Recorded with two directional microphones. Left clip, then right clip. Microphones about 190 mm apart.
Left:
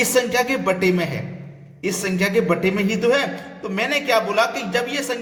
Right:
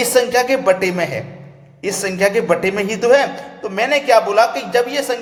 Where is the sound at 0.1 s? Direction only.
10° left (ahead or behind).